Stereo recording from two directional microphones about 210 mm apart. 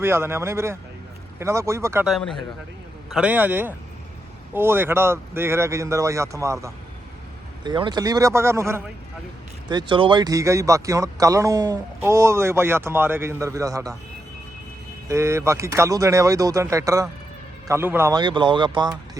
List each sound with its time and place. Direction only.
0.0 s speech: 10° right (ahead or behind)
2.0 s speech: centre (ahead or behind); by 13.9 s 15° right (ahead or behind)
15.1 s speech: 15° right (ahead or behind)